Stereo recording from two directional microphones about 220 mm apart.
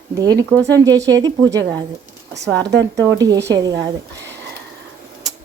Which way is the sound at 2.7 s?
55° right (ahead or behind).